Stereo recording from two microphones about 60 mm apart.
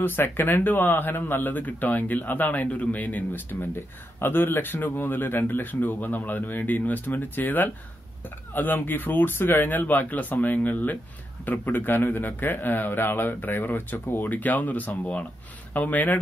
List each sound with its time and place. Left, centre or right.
0.0 s speech: left